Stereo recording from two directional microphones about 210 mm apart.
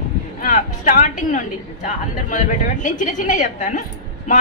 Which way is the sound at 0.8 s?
40° left (ahead or behind).